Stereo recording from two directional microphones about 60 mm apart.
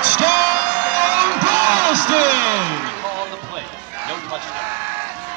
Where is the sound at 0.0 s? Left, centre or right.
Right.